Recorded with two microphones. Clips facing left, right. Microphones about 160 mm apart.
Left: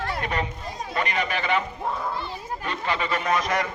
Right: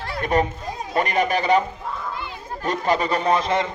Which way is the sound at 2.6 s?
40° right (ahead or behind).